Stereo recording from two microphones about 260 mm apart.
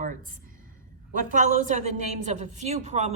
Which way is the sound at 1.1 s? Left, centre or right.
Right.